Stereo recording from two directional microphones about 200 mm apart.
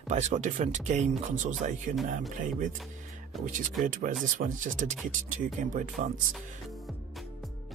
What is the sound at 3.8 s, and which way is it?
Speech, 40° right (ahead or behind).